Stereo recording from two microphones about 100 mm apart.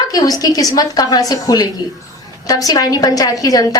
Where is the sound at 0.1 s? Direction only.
40° left (ahead or behind).